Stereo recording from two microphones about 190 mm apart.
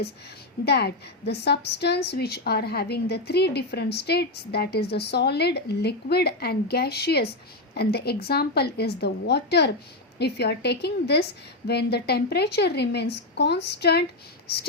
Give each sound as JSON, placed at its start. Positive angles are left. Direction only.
{"t": 0.6, "sound": "a woman's voice", "side_deg": 60}